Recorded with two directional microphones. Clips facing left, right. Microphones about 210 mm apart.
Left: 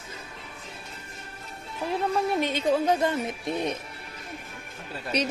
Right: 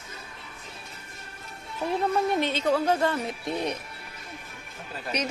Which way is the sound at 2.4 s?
15° left (ahead or behind).